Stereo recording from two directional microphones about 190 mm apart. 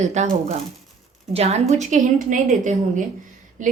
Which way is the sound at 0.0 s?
35° right (ahead or behind).